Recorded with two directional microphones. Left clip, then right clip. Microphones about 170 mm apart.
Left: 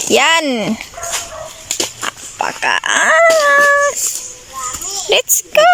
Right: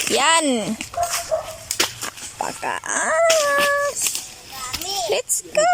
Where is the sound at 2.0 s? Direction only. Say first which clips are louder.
Left 8 dB; 10° right (ahead or behind).